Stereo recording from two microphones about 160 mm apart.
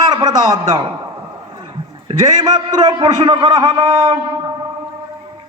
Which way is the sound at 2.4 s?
25° right (ahead or behind).